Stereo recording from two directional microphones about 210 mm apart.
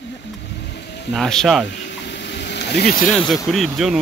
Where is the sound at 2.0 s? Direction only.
55° left (ahead or behind).